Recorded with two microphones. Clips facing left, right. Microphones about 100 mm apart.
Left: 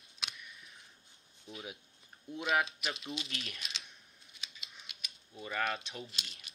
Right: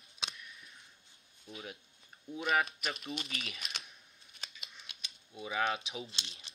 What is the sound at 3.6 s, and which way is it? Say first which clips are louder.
Typing: right 2 dB; 50° right (ahead or behind).